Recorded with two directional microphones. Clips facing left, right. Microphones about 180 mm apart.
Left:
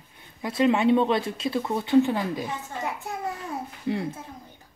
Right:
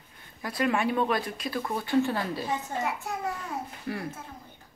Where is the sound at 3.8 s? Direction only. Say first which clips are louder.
Left 8 dB; 20° left (ahead or behind).